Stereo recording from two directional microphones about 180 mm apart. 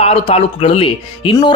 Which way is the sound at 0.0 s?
30° left (ahead or behind).